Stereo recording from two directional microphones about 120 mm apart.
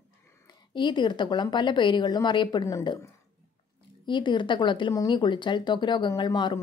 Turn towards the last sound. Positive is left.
turn(degrees=40)  # may be behind; listen again after turning